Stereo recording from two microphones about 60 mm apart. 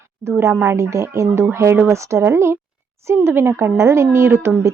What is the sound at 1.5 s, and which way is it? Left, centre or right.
A woman's voice, right.